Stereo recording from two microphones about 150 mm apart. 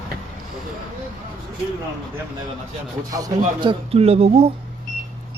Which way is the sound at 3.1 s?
25° right (ahead or behind).